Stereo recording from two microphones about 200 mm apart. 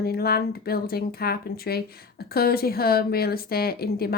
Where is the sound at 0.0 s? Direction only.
50° left (ahead or behind).